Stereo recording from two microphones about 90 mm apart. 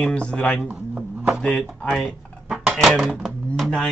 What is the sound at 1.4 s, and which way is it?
Speech, 5° left (ahead or behind).